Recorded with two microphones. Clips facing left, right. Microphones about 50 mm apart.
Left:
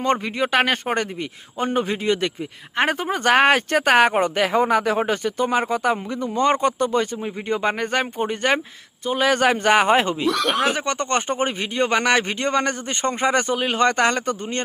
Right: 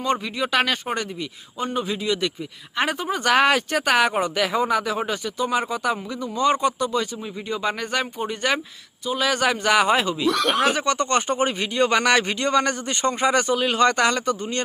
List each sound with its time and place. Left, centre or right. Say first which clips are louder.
0.0 s speech: left 3 dB; left
1.5 s a man's voice: left 3 dB; left
10.2 s speech: even; centre
10.8 s a man's voice: right 1 dB; left